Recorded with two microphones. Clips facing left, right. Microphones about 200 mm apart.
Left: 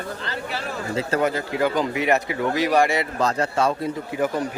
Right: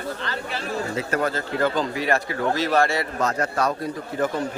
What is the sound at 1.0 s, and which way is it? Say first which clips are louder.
Speech: left 4 dB; 30° left (ahead or behind).